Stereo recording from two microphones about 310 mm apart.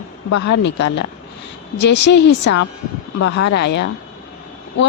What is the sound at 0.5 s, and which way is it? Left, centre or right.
Speech, left.